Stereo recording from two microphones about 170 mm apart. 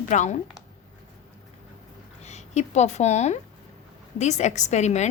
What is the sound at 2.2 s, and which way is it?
A woman's voice, 40° left (ahead or behind).